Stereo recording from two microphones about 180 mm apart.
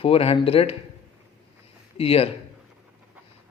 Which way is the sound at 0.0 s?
30° left (ahead or behind).